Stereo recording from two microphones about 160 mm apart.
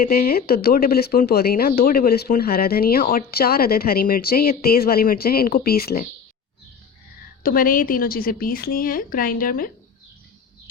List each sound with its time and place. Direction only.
0.0 s speech: 65° left (ahead or behind)
7.4 s a woman's voice: 60° left (ahead or behind)